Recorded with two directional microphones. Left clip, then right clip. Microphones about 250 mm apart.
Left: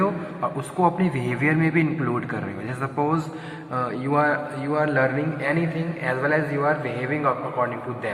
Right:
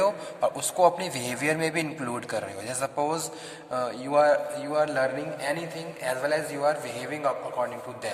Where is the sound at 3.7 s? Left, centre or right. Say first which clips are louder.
Left 2 dB; right.